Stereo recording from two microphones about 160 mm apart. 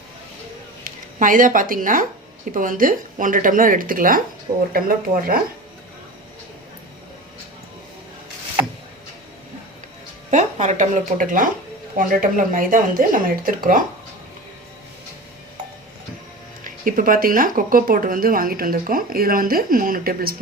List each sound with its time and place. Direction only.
0.9 s a woman's voice: 55° right (ahead or behind)
10.3 s speech: 50° right (ahead or behind)
16.6 s speech: 60° right (ahead or behind)